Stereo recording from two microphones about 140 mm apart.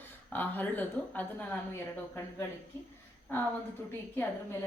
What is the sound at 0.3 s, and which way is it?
A woman's voice, 10° left (ahead or behind).